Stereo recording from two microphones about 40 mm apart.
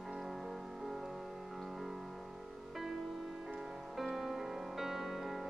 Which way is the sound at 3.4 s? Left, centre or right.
Centre.